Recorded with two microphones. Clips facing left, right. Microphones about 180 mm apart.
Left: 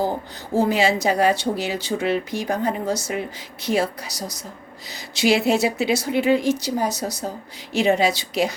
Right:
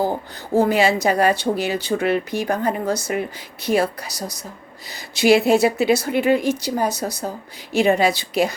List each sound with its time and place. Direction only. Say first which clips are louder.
0.5 s speech: right 2 dB; 55° right (ahead or behind)